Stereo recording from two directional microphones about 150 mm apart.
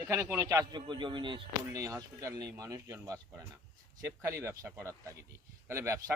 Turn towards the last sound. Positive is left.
turn(degrees=-20)  # may be behind; listen again after turning